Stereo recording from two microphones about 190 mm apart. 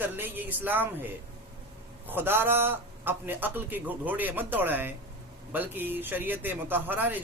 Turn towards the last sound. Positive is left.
turn(degrees=-10)  # may be behind; listen again after turning